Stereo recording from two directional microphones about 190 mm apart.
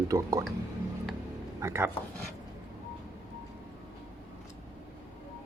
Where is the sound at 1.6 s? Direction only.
15° right (ahead or behind).